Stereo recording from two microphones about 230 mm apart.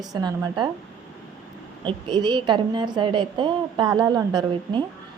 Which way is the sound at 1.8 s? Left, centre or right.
Centre.